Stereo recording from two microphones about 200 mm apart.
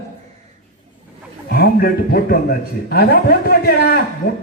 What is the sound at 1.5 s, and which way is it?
A man's voice, 50° left (ahead or behind).